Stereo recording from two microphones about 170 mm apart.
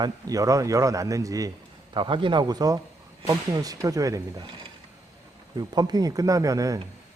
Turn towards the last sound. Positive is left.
turn(degrees=-20)  # may be behind; listen again after turning